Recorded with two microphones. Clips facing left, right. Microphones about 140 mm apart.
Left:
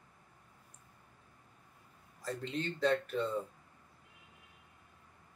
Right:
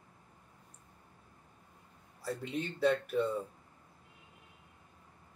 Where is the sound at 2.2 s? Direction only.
10° right (ahead or behind).